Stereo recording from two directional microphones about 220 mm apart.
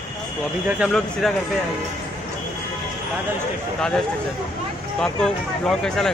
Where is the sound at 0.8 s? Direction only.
Centre (ahead or behind).